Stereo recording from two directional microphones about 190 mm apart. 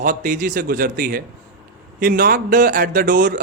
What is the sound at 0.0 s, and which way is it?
A man's voice, 45° right (ahead or behind).